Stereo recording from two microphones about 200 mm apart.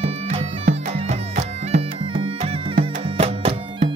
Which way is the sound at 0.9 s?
30° right (ahead or behind).